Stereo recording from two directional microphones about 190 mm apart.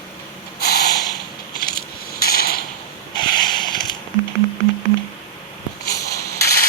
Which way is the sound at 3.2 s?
25° left (ahead or behind).